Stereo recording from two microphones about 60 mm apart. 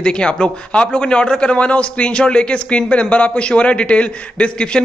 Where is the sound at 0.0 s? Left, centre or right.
Centre.